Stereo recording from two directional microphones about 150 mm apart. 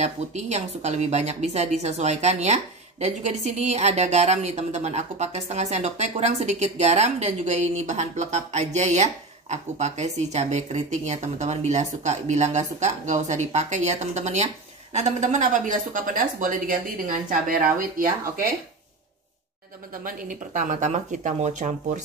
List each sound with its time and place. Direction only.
0.0 s speech: 50° right (ahead or behind); by 18.4 s 70° right (ahead or behind)
20.2 s speech: 60° right (ahead or behind)